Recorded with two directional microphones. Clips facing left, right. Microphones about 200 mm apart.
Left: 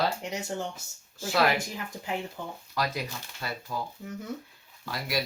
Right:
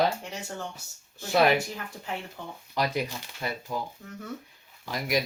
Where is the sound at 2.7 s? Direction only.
20° right (ahead or behind).